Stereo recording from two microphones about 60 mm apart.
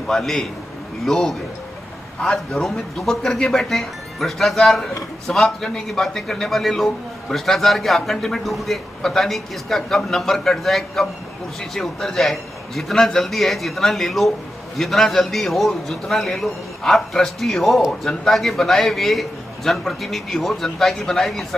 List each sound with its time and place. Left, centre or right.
0.0 s a man's voice: centre